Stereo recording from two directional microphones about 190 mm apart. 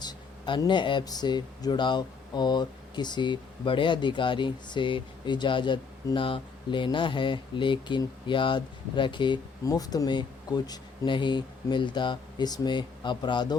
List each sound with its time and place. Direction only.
0.0 s speech: 25° left (ahead or behind)